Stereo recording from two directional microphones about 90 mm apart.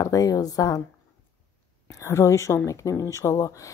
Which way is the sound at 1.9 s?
35° left (ahead or behind).